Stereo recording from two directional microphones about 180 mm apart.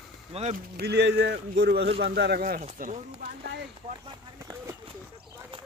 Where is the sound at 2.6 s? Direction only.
45° right (ahead or behind).